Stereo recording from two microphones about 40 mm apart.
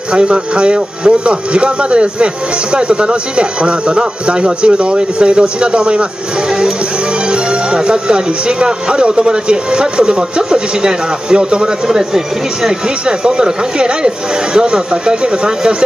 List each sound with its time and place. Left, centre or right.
0.1 s speech: right
7.2 s speech: right